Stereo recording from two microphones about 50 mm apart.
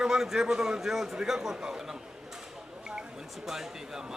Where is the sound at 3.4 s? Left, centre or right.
Centre.